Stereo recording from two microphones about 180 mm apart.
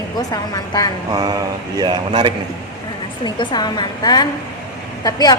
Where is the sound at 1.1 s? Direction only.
20° right (ahead or behind).